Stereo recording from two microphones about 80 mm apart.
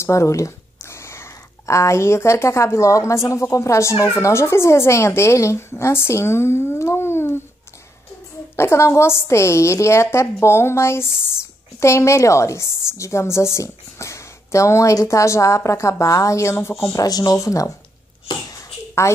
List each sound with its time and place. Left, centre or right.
0.0 s a woman's voice: left
8.5 s a woman's voice: left
16.9 s speech: left
18.5 s a sound: left